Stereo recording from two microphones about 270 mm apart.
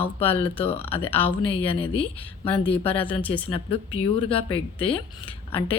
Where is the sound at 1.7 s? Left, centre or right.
Centre.